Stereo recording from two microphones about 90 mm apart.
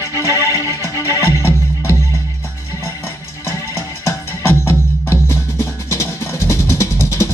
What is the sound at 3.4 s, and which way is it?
Music, 30° left (ahead or behind).